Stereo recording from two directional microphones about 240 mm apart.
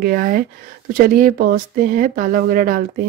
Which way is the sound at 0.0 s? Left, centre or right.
Right.